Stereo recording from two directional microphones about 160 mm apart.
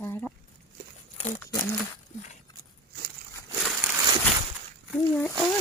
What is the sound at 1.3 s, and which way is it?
Speech, 15° left (ahead or behind).